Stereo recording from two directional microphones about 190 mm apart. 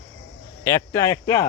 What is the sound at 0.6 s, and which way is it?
Speech, 15° left (ahead or behind).